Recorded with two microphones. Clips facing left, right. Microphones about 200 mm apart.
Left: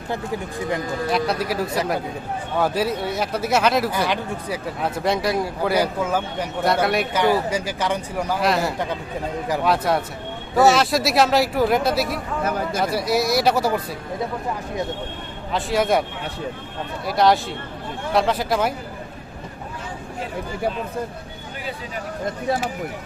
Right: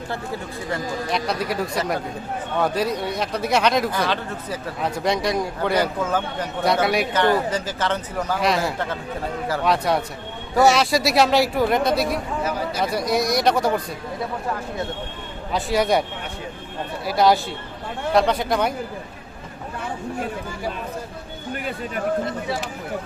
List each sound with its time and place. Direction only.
1.1 s speech: 5° left (ahead or behind)
12.4 s speech: 55° left (ahead or behind)
12.8 s speech: 5° left (ahead or behind)
15.5 s speech: centre (ahead or behind)
17.1 s speech: centre (ahead or behind)